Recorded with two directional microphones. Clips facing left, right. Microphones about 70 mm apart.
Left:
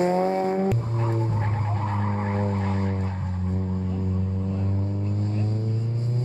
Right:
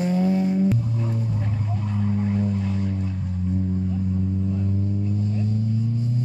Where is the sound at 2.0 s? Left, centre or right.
Left.